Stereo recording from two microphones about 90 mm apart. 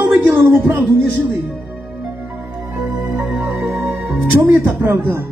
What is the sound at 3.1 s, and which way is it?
Music, 15° right (ahead or behind).